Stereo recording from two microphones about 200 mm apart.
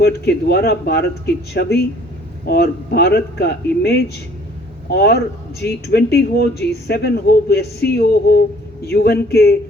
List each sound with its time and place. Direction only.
0.0 s a man's voice: 55° left (ahead or behind)